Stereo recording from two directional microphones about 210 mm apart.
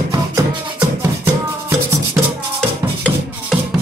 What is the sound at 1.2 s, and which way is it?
Music, 15° right (ahead or behind).